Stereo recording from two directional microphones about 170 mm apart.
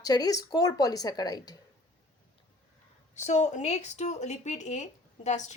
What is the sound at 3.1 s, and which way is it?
A woman's voice, 45° left (ahead or behind).